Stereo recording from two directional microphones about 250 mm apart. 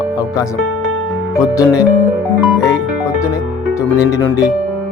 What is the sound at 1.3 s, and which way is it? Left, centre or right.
Speech, centre.